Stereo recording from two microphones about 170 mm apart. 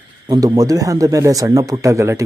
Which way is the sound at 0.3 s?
20° right (ahead or behind).